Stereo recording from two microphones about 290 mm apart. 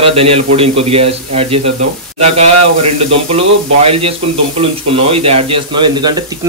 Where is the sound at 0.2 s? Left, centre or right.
Centre.